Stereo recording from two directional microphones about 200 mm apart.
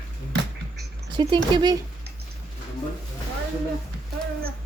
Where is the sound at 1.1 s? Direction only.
25° right (ahead or behind).